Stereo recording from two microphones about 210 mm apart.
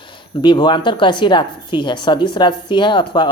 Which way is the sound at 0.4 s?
20° left (ahead or behind).